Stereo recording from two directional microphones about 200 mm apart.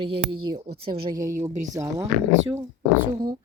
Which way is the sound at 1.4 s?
40° right (ahead or behind).